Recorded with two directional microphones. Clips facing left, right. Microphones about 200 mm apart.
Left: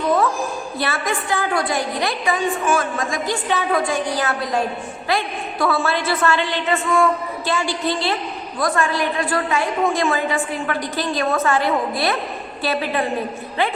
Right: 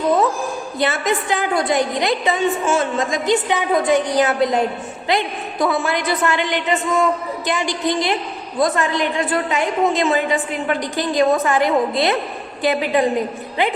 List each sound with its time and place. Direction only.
0.8 s a woman's voice: 20° right (ahead or behind)